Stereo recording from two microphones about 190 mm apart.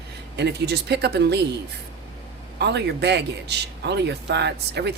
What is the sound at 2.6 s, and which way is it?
A man's voice, 65° right (ahead or behind).